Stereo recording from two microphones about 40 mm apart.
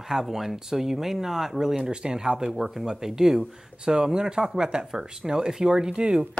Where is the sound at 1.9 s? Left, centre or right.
Right.